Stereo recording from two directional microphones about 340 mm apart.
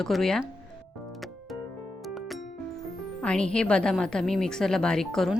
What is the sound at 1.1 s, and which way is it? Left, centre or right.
Music, centre.